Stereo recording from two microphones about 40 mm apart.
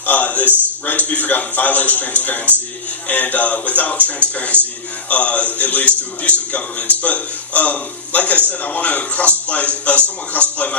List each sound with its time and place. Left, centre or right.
0.0 s a man's voice: left